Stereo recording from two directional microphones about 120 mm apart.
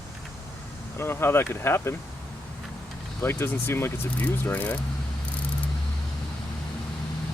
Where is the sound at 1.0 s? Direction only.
20° left (ahead or behind).